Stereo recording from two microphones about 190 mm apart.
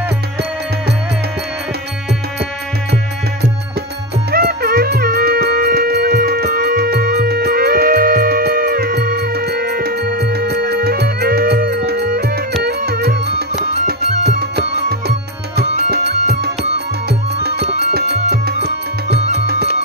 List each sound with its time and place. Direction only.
4.3 s music: 55° right (ahead or behind)
14.5 s music: 55° right (ahead or behind)
17.7 s music: 60° right (ahead or behind)